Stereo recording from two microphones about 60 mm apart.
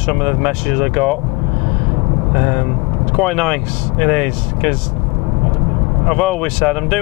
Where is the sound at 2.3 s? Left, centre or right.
Centre.